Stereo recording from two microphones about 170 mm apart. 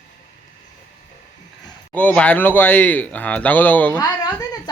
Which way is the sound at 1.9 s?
10° left (ahead or behind).